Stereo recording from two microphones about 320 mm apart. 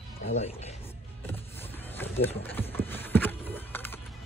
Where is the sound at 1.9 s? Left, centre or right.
Centre.